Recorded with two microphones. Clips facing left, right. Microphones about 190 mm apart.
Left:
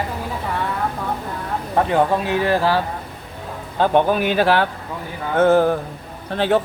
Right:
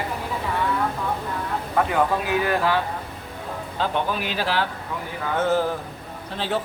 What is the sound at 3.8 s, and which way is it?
Speech, 55° left (ahead or behind).